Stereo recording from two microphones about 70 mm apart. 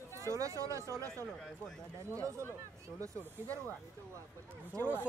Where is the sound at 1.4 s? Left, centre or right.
Centre.